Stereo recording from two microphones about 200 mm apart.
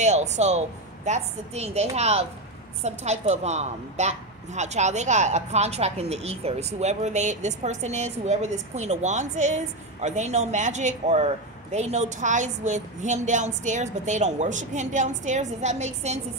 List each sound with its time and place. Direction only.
0.0 s a woman's voice: 35° right (ahead or behind)